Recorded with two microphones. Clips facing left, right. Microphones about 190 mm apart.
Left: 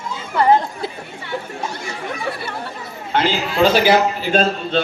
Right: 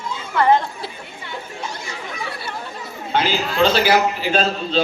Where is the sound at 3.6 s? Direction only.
15° left (ahead or behind).